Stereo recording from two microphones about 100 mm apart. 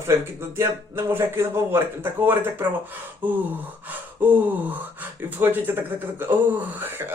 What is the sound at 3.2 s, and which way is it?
Gasp, 15° right (ahead or behind).